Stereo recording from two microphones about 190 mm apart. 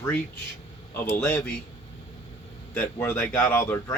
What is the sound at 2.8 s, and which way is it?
Speech, 10° left (ahead or behind).